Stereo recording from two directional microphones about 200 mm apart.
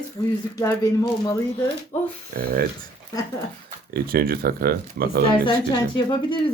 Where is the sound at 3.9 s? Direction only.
50° right (ahead or behind).